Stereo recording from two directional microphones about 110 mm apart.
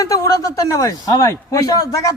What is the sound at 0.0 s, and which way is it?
A man's voice, 30° left (ahead or behind).